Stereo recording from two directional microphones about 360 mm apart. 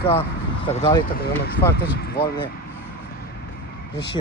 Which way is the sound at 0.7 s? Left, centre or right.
Centre.